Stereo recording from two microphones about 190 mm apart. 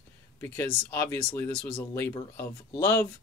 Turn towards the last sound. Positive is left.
turn(degrees=10)  # may be behind; listen again after turning